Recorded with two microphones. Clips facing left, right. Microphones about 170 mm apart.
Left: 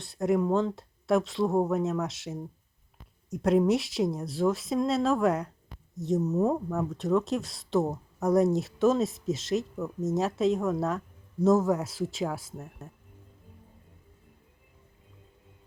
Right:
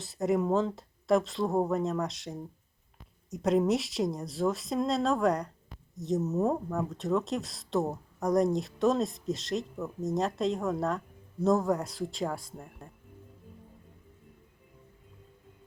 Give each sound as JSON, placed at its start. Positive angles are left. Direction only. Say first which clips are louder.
{"t": 0.0, "sound": "speech", "louder": "left 2 dB", "side_deg": 0}